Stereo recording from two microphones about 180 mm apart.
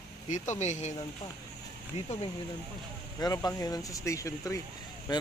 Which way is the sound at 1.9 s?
40° left (ahead or behind).